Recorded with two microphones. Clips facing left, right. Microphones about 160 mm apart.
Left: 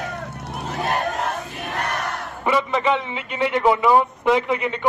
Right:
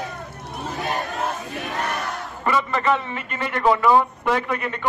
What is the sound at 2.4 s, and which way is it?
A man's voice, 15° left (ahead or behind).